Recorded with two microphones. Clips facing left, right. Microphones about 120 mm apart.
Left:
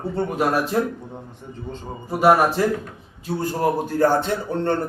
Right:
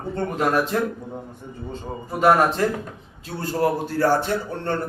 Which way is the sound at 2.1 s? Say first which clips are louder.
Left 1 dB; 15° left (ahead or behind).